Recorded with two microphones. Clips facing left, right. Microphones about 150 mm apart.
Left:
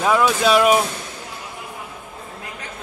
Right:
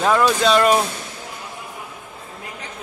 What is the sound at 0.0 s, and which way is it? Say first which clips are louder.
Speech: even; 5° left (ahead or behind).